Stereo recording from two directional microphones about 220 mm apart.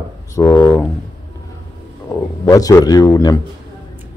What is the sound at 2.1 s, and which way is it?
Speech, 15° left (ahead or behind).